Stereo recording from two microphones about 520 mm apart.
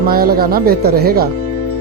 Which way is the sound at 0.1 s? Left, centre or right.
Centre.